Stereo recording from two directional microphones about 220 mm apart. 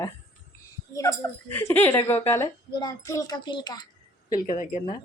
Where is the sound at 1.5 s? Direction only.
10° left (ahead or behind).